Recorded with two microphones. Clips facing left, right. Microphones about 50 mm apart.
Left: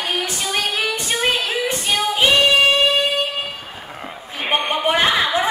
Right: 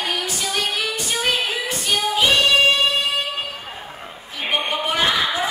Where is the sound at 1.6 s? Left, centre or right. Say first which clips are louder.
Left 2 dB; left.